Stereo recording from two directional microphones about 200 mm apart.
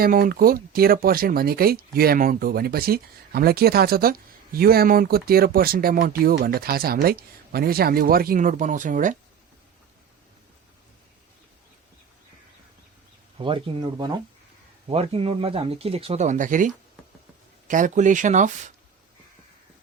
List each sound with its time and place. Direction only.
0.0 s speech: 45° right (ahead or behind)
13.4 s speech: 25° right (ahead or behind)